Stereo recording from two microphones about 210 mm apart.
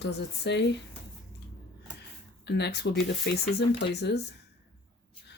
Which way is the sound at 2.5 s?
55° left (ahead or behind).